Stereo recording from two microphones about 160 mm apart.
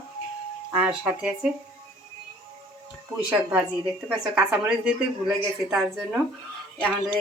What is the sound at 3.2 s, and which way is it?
A woman's voice, 10° right (ahead or behind).